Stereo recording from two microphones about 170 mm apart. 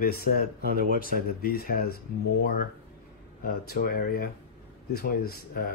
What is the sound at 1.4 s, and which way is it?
Speech, 60° left (ahead or behind).